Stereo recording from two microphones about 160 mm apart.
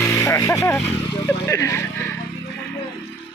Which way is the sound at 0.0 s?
20° left (ahead or behind).